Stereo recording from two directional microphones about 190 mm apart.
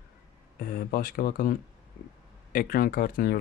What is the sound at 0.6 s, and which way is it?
Speech, 50° left (ahead or behind).